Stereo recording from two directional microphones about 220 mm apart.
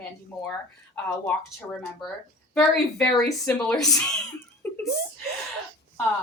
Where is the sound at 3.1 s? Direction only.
10° left (ahead or behind).